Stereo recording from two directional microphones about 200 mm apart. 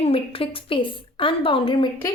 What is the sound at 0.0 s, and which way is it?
A woman's voice, 30° left (ahead or behind).